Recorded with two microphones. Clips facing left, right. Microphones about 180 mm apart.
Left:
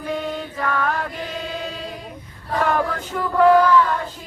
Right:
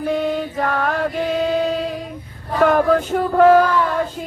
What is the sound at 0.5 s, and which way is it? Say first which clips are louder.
Music: right 3 dB; 45° right (ahead or behind).